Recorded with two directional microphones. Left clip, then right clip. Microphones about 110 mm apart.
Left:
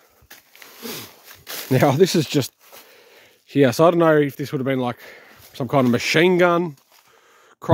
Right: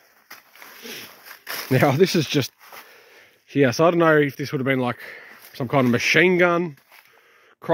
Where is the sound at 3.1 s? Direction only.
45° left (ahead or behind).